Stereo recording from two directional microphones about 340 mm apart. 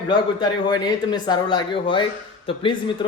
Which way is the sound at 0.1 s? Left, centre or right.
Centre.